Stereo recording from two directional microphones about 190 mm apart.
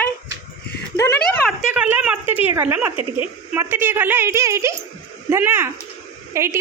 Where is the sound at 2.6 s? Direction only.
10° right (ahead or behind).